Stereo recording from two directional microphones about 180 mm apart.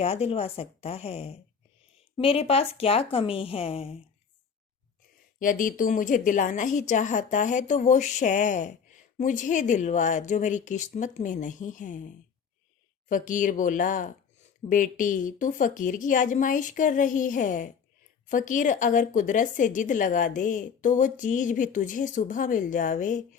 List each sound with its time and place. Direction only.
0.0 s a woman's voice: 35° left (ahead or behind)
5.4 s speech: 50° left (ahead or behind)